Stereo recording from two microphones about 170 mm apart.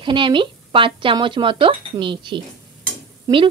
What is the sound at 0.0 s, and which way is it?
Speech, 30° right (ahead or behind).